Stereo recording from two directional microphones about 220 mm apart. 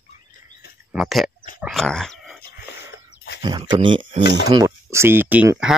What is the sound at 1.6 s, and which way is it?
Dog, centre (ahead or behind).